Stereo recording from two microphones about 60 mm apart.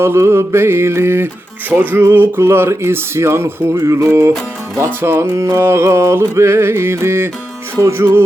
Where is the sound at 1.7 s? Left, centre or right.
Right.